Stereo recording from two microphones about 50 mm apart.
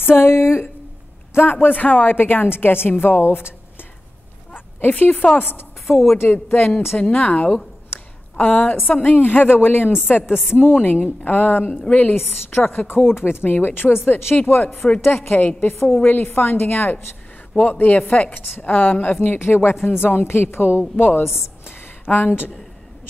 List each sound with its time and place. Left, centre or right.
0.0 s a woman's voice: left
2.1 s a woman's voice: left
4.6 s a sound: left
4.9 s a woman's voice: left
5.9 s speech: centre
6.2 s a woman's voice: left
7.0 s a woman's voice: left
11.8 s speech: left
12.4 s a woman's voice: left
15.0 s a woman's voice: left
17.6 s a woman's voice: left
19.2 s a woman's voice: left
21.2 s a sound: left